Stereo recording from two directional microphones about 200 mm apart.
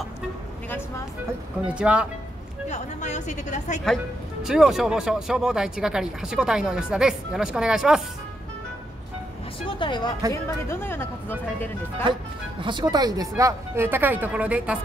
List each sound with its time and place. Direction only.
1.7 s speech: 5° right (ahead or behind)
2.7 s a woman's voice: 35° left (ahead or behind)
3.8 s speech: centre (ahead or behind)
9.8 s speech: 25° left (ahead or behind)
10.3 s speech: 10° left (ahead or behind)
12.1 s speech: 25° right (ahead or behind); by 14.8 s 5° right (ahead or behind)